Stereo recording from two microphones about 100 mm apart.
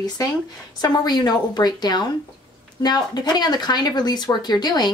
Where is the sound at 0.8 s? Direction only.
45° left (ahead or behind).